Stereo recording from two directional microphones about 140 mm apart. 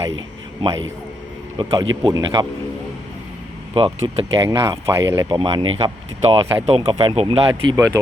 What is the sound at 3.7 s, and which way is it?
Speech, 40° right (ahead or behind).